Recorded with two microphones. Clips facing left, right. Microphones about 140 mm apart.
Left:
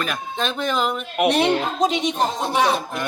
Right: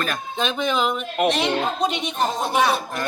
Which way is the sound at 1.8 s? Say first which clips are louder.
Left 4 dB; 90° left.